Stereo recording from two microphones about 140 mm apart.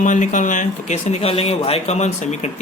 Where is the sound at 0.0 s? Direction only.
65° left (ahead or behind).